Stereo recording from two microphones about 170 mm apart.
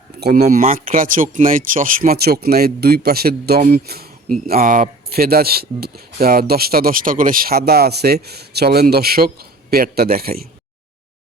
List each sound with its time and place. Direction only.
0.3 s speech: 45° right (ahead or behind)
0.9 s speech: 55° right (ahead or behind)